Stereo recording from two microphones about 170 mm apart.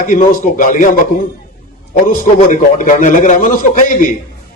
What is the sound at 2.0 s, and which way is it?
A man's voice, 50° left (ahead or behind).